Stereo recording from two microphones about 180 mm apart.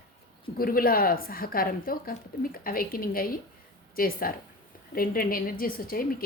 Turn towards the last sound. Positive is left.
turn(degrees=55)  # may be behind; listen again after turning